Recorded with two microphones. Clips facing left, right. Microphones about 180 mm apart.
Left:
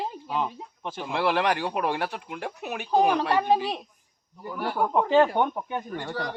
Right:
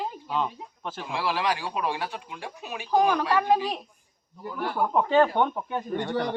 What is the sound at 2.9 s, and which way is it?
Speech, 25° left (ahead or behind).